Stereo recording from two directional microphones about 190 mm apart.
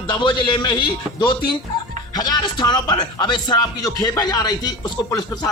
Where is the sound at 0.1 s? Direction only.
25° left (ahead or behind).